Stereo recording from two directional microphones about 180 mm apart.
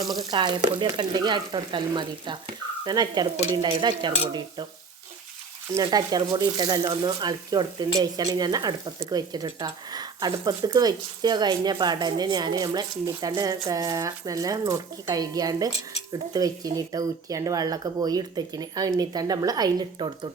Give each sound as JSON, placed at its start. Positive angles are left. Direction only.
{"t": 0.2, "sound": "speech", "side_deg": -25}
{"t": 5.7, "sound": "speech", "side_deg": -20}